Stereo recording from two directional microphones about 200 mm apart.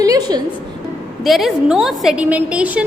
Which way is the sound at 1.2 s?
Centre (ahead or behind).